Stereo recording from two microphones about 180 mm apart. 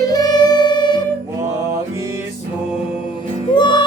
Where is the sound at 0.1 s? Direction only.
25° left (ahead or behind).